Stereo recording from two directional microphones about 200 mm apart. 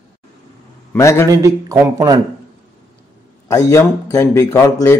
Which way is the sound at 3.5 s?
15° left (ahead or behind).